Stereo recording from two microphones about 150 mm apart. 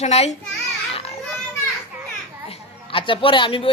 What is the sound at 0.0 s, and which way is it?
Speech, 45° left (ahead or behind).